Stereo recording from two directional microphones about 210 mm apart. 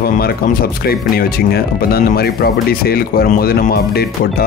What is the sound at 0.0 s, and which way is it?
A man's voice, 45° left (ahead or behind).